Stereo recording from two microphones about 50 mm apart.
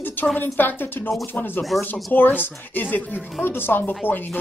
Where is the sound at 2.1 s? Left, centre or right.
Left.